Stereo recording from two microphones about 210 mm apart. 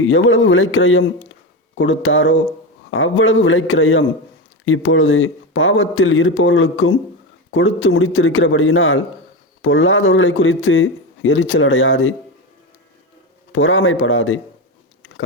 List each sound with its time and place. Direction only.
0.0 s a man's voice: 70° left (ahead or behind)
13.5 s a man's voice: 70° left (ahead or behind)